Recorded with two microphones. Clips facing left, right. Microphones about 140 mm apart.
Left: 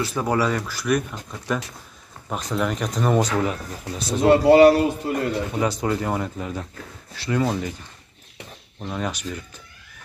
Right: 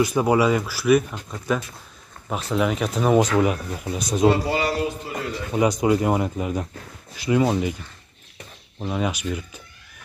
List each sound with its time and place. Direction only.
0.0 s speech: 15° right (ahead or behind)
2.5 s speech: 5° right (ahead or behind)
4.3 s speech: 65° left (ahead or behind)
5.5 s speech: 15° right (ahead or behind)
8.7 s speech: 10° right (ahead or behind)